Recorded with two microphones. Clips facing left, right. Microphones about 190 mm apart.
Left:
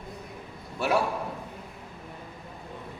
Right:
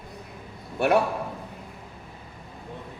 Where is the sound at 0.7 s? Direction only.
60° right (ahead or behind).